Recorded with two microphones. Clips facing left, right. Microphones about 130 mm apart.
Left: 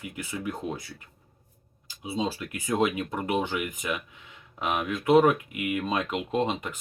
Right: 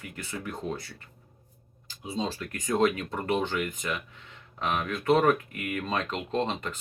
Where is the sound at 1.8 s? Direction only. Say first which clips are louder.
Left 2 dB; 10° left (ahead or behind).